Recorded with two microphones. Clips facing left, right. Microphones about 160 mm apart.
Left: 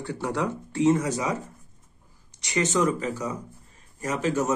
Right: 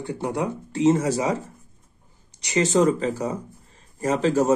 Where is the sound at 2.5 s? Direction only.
30° right (ahead or behind).